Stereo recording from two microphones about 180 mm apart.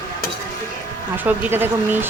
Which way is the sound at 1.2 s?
10° right (ahead or behind).